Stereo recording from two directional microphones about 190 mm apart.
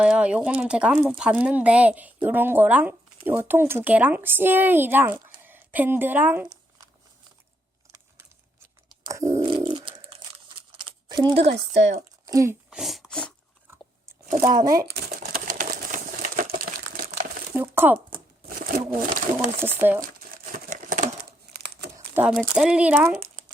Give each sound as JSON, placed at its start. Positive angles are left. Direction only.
{"t": 0.0, "sound": "a woman's voice", "side_deg": -5}
{"t": 9.0, "sound": "biting", "side_deg": -15}
{"t": 9.4, "sound": "a sound", "side_deg": -25}
{"t": 11.1, "sound": "speech", "side_deg": -20}
{"t": 12.7, "sound": "a sound", "side_deg": 0}
{"t": 14.4, "sound": "a child's voice", "side_deg": -20}
{"t": 14.8, "sound": "typewriter", "side_deg": -55}
{"t": 16.6, "sound": "crumpling", "side_deg": -45}
{"t": 17.5, "sound": "speech", "side_deg": -10}
{"t": 18.4, "sound": "speech", "side_deg": -45}
{"t": 19.5, "sound": "speech", "side_deg": -10}
{"t": 20.0, "sound": "crumpling", "side_deg": -45}
{"t": 21.2, "sound": "crumpling", "side_deg": -55}
{"t": 21.9, "sound": "speech", "side_deg": -10}